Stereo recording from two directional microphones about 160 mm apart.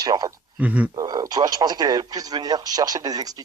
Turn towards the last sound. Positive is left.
turn(degrees=-25)  # may be behind; listen again after turning